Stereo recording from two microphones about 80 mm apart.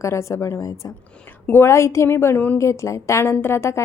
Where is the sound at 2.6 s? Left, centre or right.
Left.